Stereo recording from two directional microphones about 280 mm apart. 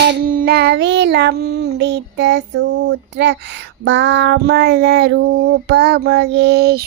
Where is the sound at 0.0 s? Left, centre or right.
Right.